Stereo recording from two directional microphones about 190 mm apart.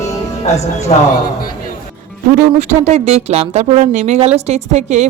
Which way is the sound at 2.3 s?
40° right (ahead or behind).